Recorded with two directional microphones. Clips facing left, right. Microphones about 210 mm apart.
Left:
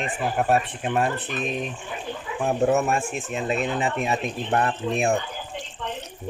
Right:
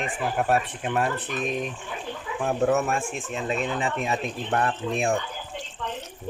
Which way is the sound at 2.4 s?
15° left (ahead or behind).